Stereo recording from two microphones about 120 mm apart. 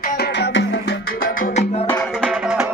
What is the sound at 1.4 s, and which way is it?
Music, 70° left (ahead or behind).